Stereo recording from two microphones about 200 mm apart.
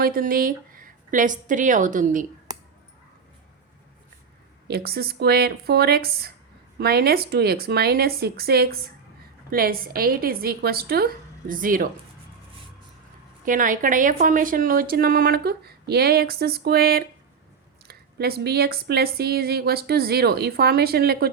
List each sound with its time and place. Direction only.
0.0 s speech: 45° right (ahead or behind)
4.7 s speech: 50° right (ahead or behind)
13.4 s speech: 40° right (ahead or behind)